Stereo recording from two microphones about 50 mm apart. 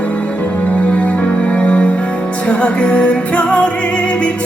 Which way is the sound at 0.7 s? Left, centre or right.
Left.